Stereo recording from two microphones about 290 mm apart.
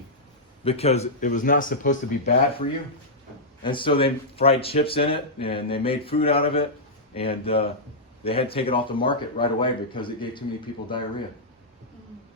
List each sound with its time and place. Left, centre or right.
0.6 s speech: left